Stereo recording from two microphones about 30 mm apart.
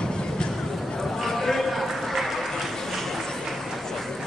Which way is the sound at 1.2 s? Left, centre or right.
Centre.